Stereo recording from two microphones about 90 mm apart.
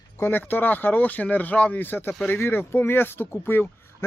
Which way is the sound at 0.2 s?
20° left (ahead or behind).